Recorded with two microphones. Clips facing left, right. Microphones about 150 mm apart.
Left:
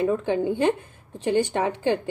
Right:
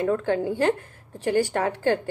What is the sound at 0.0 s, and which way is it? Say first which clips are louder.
Speech: left 1 dB; 15° left (ahead or behind).